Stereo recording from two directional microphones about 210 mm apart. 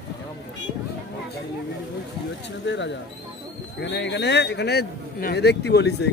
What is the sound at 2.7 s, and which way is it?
Speech, 55° left (ahead or behind).